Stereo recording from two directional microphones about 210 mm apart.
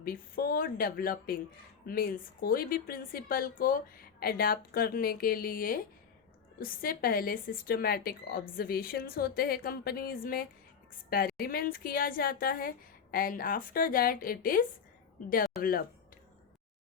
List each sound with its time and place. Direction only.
0.0 s a woman's voice: 45° left (ahead or behind)